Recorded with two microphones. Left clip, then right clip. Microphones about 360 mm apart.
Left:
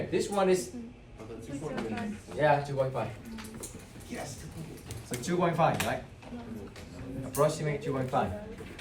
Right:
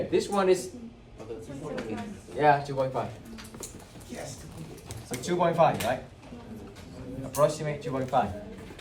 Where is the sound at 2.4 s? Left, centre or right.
Centre.